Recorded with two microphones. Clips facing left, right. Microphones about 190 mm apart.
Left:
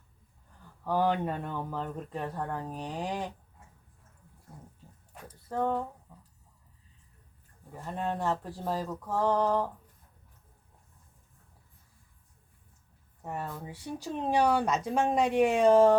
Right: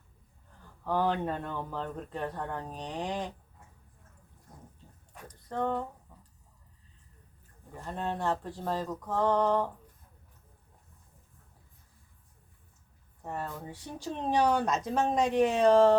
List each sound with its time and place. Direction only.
0.9 s speech: 10° left (ahead or behind)
5.5 s speech: 5° left (ahead or behind)
7.9 s a sound: 5° left (ahead or behind)
13.2 s speech: 10° left (ahead or behind)